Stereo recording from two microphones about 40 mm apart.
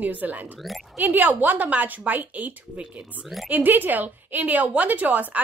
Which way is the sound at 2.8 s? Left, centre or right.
Right.